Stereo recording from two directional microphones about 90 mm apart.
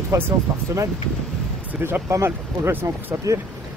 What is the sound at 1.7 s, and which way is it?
Speech, 20° right (ahead or behind).